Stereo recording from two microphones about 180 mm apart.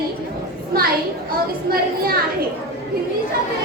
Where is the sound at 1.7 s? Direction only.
55° right (ahead or behind).